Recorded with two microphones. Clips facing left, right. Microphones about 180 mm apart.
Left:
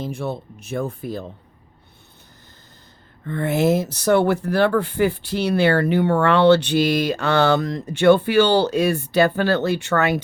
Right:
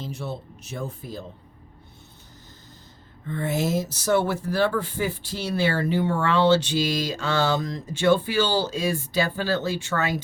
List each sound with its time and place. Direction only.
0.0 s speech: 55° left (ahead or behind)
3.2 s speech: 60° left (ahead or behind)